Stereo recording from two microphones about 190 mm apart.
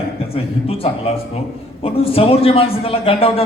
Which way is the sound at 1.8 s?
30° left (ahead or behind).